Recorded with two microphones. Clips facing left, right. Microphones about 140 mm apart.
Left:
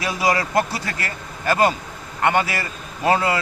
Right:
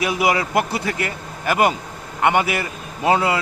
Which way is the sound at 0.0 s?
15° right (ahead or behind).